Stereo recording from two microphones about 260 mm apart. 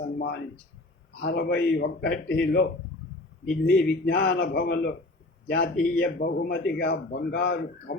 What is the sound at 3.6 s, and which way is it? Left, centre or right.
A man's voice, left.